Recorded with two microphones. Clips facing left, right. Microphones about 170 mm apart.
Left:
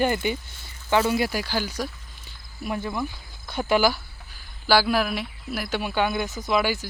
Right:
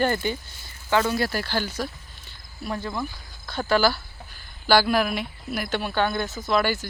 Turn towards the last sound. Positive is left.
turn(degrees=10)  # may be behind; listen again after turning